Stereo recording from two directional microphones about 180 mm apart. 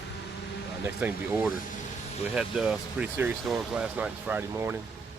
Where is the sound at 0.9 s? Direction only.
10° right (ahead or behind).